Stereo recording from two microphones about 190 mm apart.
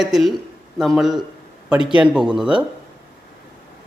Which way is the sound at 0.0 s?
Centre (ahead or behind).